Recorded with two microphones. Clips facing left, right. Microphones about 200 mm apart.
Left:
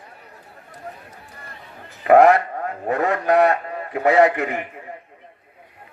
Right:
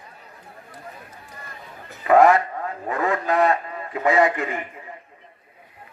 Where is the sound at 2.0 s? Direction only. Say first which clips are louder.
Left 2 dB; 60° left (ahead or behind).